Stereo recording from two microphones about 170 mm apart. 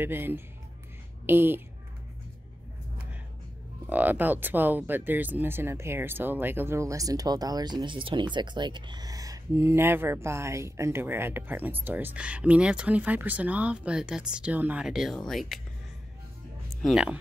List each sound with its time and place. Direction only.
0.0 s speech: 15° right (ahead or behind)
3.9 s speech: 10° right (ahead or behind)
16.8 s speech: 5° right (ahead or behind)